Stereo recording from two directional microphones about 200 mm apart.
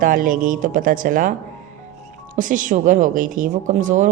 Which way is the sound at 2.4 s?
40° right (ahead or behind).